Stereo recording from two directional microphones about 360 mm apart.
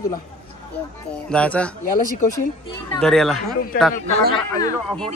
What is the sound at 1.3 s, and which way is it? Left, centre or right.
Speech, centre.